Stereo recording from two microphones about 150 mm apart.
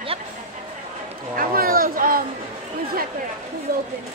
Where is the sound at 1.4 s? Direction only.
75° right (ahead or behind).